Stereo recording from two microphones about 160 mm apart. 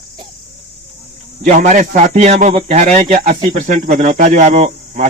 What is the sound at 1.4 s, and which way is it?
Speech, 50° right (ahead or behind).